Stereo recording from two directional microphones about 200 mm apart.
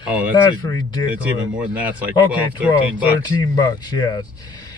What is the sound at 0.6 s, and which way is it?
Speech, 20° left (ahead or behind).